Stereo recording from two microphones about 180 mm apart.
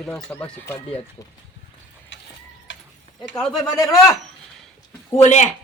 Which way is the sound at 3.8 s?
15° left (ahead or behind).